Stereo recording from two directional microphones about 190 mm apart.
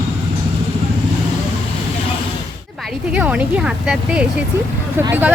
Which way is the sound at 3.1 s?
5° right (ahead or behind).